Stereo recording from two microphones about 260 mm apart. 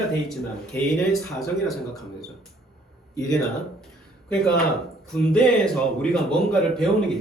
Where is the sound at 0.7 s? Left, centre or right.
Centre.